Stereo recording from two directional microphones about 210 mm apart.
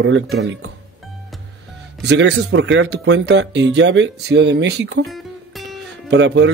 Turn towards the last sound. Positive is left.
turn(degrees=-55)  # may be behind; listen again after turning